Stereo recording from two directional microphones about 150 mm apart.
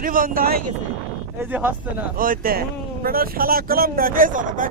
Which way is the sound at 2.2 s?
75° right (ahead or behind).